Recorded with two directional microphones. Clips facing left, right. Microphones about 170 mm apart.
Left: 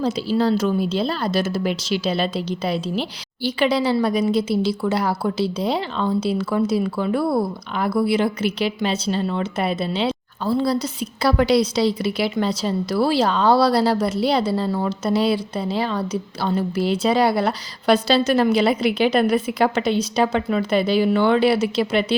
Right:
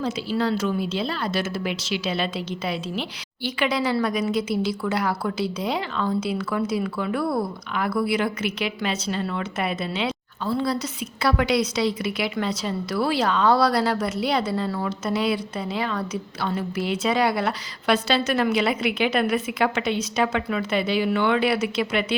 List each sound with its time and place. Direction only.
0.0 s a woman's voice: 35° left (ahead or behind)